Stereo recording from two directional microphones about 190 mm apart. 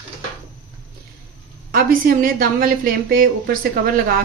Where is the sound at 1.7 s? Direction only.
50° right (ahead or behind).